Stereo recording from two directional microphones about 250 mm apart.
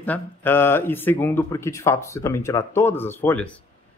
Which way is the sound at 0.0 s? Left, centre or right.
Centre.